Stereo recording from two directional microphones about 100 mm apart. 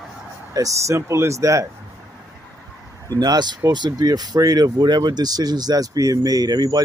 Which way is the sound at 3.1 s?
45° right (ahead or behind).